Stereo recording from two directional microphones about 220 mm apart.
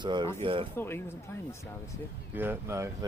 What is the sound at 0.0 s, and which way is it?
Speech, 20° right (ahead or behind).